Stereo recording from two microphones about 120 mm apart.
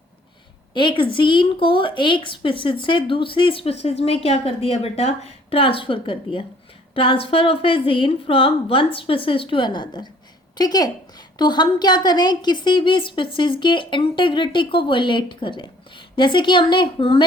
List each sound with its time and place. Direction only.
0.7 s a woman's voice: 40° left (ahead or behind)